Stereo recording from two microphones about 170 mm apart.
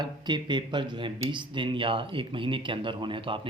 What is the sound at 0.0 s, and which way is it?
Speech, 25° right (ahead or behind).